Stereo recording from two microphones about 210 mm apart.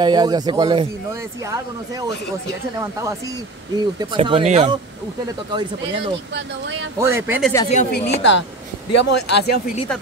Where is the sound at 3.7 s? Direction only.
25° right (ahead or behind).